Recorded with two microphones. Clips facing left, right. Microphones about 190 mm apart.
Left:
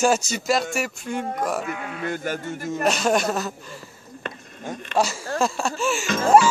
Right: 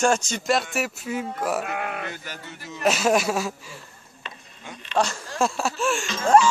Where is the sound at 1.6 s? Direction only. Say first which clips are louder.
Even; 60° right (ahead or behind).